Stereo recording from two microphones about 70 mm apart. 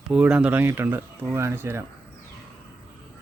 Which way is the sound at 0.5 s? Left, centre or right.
Right.